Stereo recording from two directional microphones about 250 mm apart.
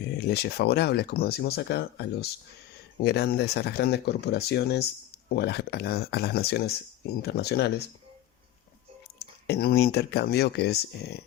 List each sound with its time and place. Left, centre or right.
0.0 s speech: left
9.1 s speech: left